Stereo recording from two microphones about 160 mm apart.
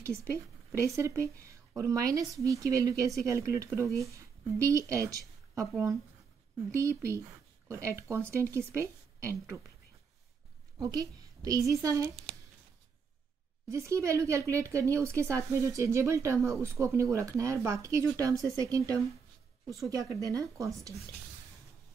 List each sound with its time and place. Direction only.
0.0 s a woman's voice: 20° right (ahead or behind)
10.8 s speech: 25° right (ahead or behind)
13.7 s speech: 20° right (ahead or behind)